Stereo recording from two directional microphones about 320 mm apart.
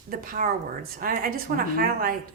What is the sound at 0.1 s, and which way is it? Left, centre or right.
A woman's voice, right.